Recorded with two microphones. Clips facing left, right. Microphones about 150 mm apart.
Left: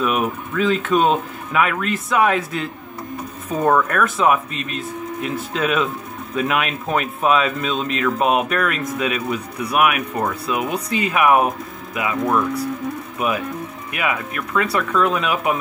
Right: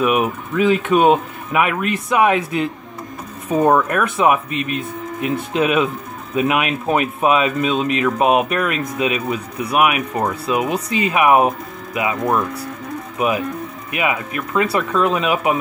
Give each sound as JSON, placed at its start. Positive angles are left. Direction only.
{"t": 0.0, "sound": "speech", "side_deg": -10}
{"t": 4.5, "sound": "speech", "side_deg": 35}
{"t": 5.5, "sound": "speech", "side_deg": -10}
{"t": 9.6, "sound": "speech", "side_deg": -25}
{"t": 13.9, "sound": "speech", "side_deg": -20}